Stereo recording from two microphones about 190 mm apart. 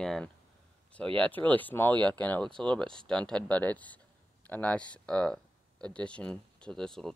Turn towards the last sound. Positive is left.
turn(degrees=5)  # may be behind; listen again after turning